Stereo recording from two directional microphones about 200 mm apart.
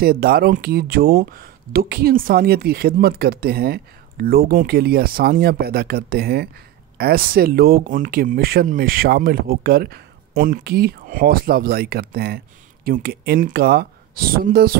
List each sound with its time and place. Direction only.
0.0 s speech: 50° right (ahead or behind)